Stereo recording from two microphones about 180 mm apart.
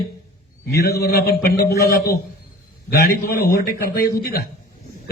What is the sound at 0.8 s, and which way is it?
A man's voice, 60° left (ahead or behind).